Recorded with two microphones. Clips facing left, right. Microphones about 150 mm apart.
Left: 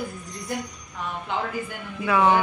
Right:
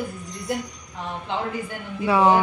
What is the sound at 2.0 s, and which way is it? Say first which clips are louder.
Speech: right 2 dB; 30° right (ahead or behind).